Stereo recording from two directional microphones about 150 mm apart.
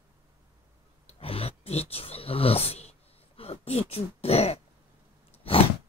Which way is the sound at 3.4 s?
40° left (ahead or behind).